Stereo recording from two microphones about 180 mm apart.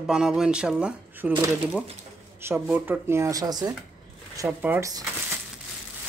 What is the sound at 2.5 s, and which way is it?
Speech, 10° right (ahead or behind).